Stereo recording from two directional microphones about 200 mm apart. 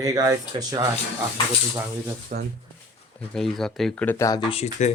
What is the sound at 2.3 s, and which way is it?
Speech, 45° right (ahead or behind).